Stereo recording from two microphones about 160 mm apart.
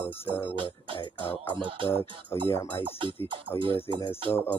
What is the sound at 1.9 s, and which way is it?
Speech, 15° left (ahead or behind).